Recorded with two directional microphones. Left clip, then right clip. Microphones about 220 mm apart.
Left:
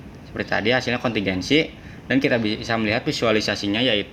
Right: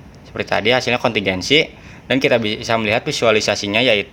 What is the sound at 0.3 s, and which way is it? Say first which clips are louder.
Speech: right 5 dB; 45° right (ahead or behind).